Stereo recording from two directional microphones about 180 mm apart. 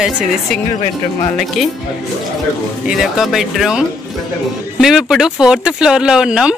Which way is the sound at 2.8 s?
5° right (ahead or behind).